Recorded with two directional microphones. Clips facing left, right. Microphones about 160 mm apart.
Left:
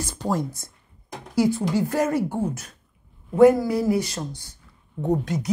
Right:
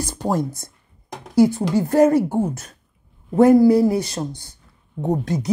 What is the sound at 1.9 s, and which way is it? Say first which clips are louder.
Speech: right 8 dB; 35° right (ahead or behind).